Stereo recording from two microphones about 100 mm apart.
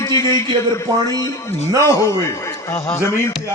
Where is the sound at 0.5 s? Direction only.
45° right (ahead or behind).